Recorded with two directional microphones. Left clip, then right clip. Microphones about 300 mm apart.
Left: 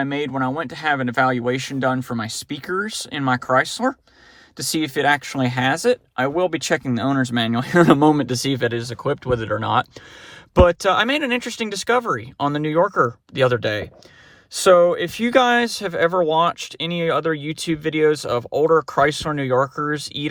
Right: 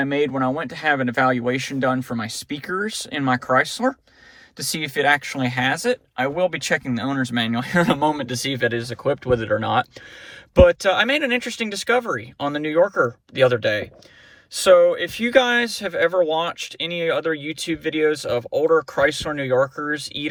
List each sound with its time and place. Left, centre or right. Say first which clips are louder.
0.0 s speech: right 2 dB; centre